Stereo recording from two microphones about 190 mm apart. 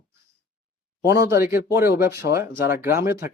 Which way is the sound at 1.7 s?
55° left (ahead or behind).